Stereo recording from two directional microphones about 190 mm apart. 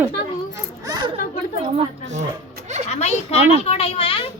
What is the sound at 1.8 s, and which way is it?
Speech, 40° right (ahead or behind).